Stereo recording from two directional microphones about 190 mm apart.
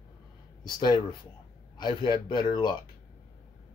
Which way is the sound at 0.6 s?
25° left (ahead or behind).